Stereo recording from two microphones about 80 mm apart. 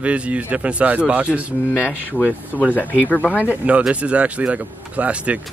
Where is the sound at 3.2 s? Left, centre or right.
Centre.